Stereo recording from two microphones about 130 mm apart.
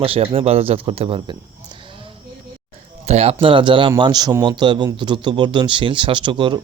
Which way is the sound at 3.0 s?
55° right (ahead or behind).